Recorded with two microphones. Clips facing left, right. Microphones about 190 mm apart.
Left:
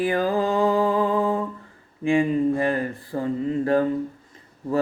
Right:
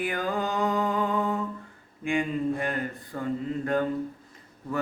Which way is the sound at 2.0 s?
30° left (ahead or behind).